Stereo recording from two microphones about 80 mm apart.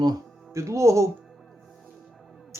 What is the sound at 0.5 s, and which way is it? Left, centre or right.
Speech, right.